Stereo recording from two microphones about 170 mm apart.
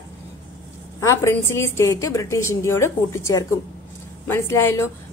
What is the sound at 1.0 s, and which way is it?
A woman's voice, 15° left (ahead or behind).